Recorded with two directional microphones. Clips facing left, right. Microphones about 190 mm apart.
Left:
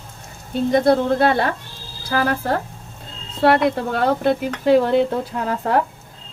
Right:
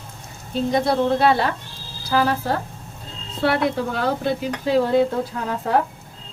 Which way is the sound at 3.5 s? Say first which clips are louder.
Left 3 dB; 60° left (ahead or behind).